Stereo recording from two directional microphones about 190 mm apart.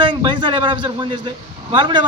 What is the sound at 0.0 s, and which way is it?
A man's voice, 25° right (ahead or behind).